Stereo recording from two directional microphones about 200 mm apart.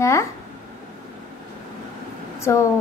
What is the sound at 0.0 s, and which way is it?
Speech, 15° left (ahead or behind).